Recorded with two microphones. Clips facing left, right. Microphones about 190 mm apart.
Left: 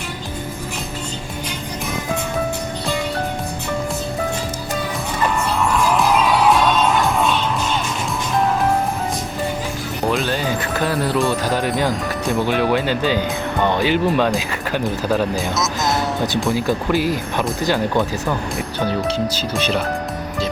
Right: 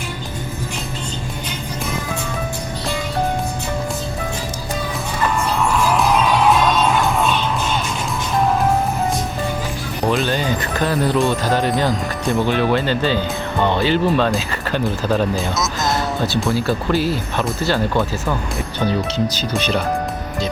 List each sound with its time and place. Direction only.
5.5 s music: centre (ahead or behind)
10.1 s speech: 5° left (ahead or behind)
15.5 s speech: centre (ahead or behind)
16.5 s speech: 15° left (ahead or behind)
19.1 s speech: 5° left (ahead or behind)